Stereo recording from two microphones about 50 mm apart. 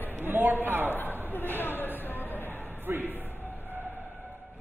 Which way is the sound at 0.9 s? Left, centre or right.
Left.